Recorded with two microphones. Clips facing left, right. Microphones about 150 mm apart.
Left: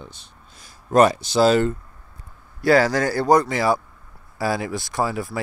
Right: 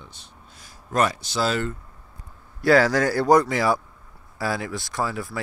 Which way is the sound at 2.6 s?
Centre (ahead or behind).